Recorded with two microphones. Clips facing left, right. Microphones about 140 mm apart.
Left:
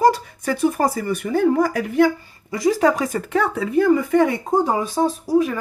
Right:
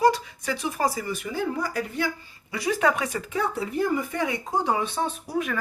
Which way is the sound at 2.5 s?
40° left (ahead or behind).